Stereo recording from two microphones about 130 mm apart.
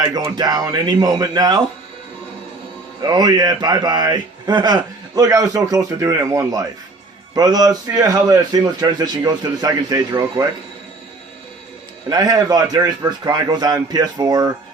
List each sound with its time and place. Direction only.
0.3 s speech: 30° right (ahead or behind)
3.0 s a man's voice: 30° right (ahead or behind)
12.0 s a man's voice: 30° right (ahead or behind)